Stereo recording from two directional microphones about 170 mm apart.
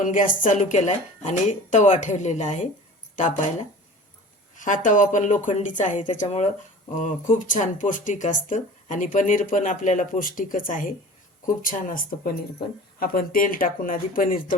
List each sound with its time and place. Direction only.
0.0 s speech: 50° left (ahead or behind)
4.5 s speech: 50° left (ahead or behind)